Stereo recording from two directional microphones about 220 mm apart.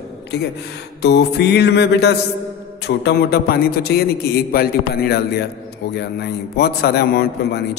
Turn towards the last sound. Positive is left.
turn(degrees=45)  # may be behind; listen again after turning